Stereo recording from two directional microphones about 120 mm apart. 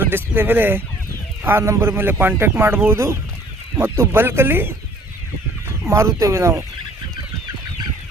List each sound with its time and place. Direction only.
0.0 s speech: 15° right (ahead or behind)
5.9 s speech: 25° right (ahead or behind)